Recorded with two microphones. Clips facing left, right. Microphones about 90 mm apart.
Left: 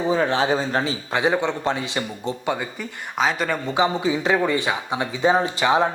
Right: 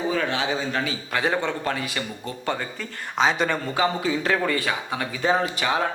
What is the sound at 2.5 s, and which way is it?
Speech, 10° left (ahead or behind).